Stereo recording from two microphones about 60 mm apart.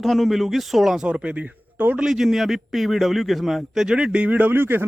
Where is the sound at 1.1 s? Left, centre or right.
Centre.